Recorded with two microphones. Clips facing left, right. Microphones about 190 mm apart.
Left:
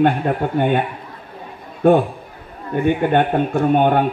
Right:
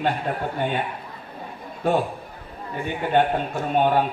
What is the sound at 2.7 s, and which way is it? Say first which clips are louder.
A man's voice: left 7 dB; 60° left (ahead or behind).